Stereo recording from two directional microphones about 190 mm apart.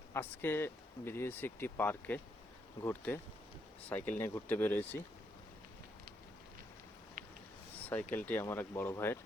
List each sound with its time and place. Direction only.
0.1 s speech: 10° left (ahead or behind)
7.2 s a sound: 45° right (ahead or behind)
7.9 s speech: 10° left (ahead or behind)